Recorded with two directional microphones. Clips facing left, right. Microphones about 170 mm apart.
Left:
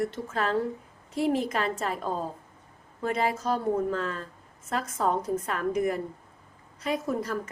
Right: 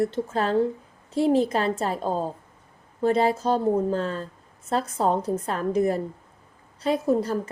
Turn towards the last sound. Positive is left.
turn(degrees=-30)  # may be behind; listen again after turning